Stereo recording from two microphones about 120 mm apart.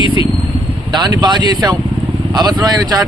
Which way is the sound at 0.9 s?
35° right (ahead or behind).